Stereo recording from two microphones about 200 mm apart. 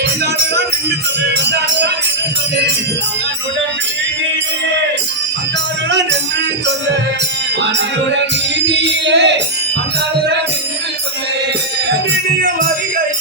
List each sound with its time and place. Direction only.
8.6 s music: 60° right (ahead or behind)